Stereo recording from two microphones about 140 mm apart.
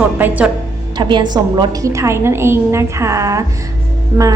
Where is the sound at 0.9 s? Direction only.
35° right (ahead or behind).